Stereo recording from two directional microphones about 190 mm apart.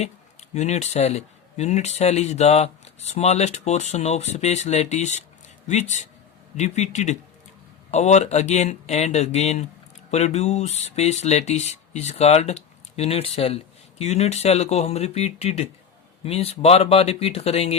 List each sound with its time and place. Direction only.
0.0 s speech: 35° left (ahead or behind)